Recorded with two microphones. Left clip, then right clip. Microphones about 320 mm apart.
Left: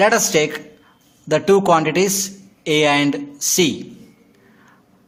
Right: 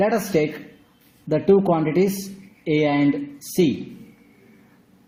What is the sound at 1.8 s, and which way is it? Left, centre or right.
A man's voice, left.